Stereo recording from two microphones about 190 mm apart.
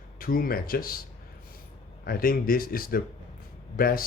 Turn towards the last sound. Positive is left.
turn(degrees=50)  # may be behind; listen again after turning